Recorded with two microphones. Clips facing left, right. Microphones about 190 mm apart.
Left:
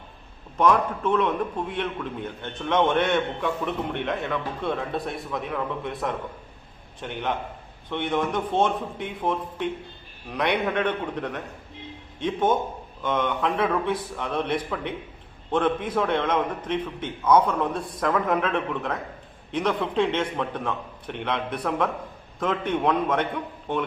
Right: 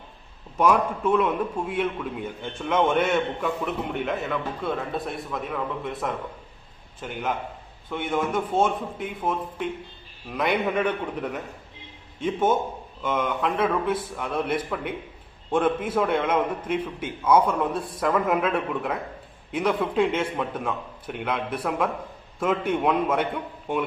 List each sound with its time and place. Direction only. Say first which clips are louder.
0.5 s a man's voice: even; 10° right (ahead or behind)